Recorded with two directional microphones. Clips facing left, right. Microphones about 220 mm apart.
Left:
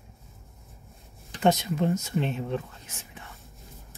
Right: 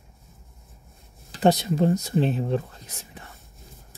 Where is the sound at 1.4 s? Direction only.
35° right (ahead or behind).